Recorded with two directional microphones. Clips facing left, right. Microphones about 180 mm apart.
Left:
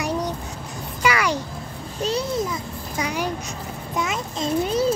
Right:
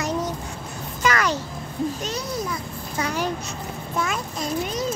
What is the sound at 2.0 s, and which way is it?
Speech, 30° left (ahead or behind).